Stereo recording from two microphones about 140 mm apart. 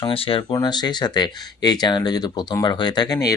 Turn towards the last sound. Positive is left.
turn(degrees=25)  # may be behind; listen again after turning